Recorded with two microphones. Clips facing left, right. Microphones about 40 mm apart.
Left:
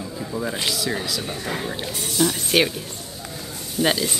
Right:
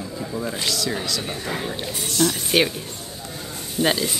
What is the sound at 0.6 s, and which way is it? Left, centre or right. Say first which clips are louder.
Speech: even; centre.